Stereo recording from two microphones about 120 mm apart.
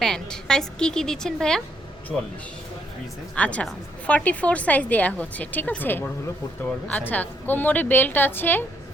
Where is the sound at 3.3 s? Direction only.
10° left (ahead or behind).